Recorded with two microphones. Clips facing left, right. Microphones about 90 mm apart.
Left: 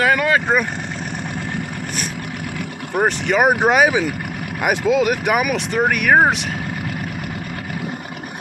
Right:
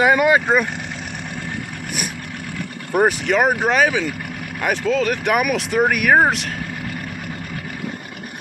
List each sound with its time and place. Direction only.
0.0 s speech: 20° right (ahead or behind)
2.9 s speech: 5° right (ahead or behind)
3.4 s speech: 15° left (ahead or behind)